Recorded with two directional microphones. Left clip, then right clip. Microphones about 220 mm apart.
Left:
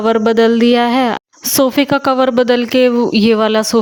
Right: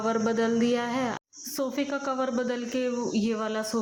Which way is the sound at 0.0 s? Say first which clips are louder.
Left 15 dB; 40° left (ahead or behind).